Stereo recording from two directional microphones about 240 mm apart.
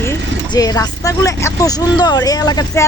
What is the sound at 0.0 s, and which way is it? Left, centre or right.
Speech, centre.